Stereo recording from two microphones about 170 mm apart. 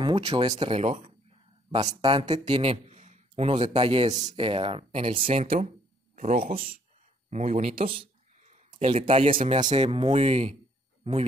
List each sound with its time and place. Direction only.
0.0 s a sound: 35° right (ahead or behind)
0.5 s speech: 30° right (ahead or behind)
2.0 s speech: 25° right (ahead or behind)
4.3 s speech: 30° right (ahead or behind)
6.1 s speech: 55° right (ahead or behind)
7.2 s speech: 45° right (ahead or behind)
8.0 s a sound: 40° right (ahead or behind)
8.7 s speech: 35° right (ahead or behind)